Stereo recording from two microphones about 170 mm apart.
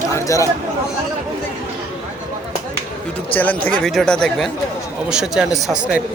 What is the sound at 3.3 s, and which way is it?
A man's voice, 10° left (ahead or behind).